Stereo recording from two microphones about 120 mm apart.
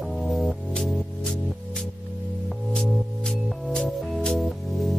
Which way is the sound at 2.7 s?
5° left (ahead or behind).